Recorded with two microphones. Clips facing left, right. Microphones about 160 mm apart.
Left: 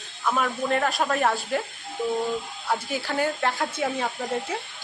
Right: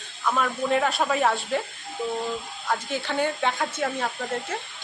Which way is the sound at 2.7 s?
5° left (ahead or behind).